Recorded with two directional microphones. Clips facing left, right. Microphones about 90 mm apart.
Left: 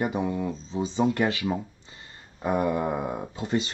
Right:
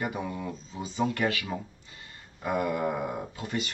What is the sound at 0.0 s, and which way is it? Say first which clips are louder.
Speech: left 6 dB; 25° left (ahead or behind).